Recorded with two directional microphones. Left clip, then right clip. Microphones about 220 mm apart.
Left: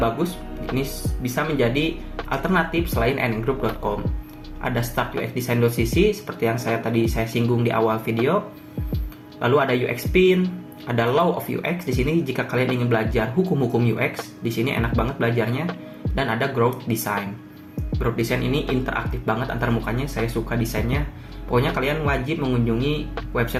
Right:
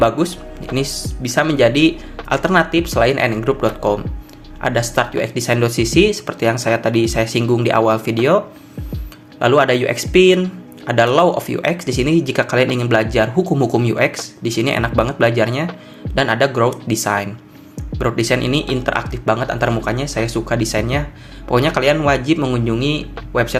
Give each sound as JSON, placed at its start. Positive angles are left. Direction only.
{"t": 0.8, "sound": "speech", "side_deg": -45}
{"t": 9.4, "sound": "speech", "side_deg": -40}